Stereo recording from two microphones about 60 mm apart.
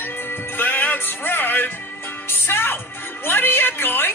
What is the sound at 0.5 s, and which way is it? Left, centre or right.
Music, left.